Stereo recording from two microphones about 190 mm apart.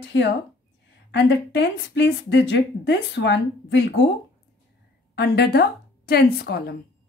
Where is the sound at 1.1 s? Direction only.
65° left (ahead or behind).